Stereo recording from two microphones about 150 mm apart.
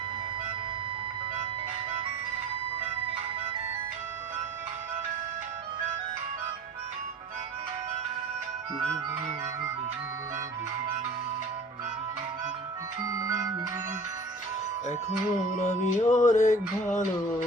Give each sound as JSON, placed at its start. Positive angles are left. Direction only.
{"t": 13.1, "sound": "music", "side_deg": -25}
{"t": 15.6, "sound": "music", "side_deg": 55}